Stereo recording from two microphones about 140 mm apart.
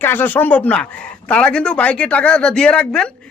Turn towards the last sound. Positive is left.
turn(degrees=5)  # may be behind; listen again after turning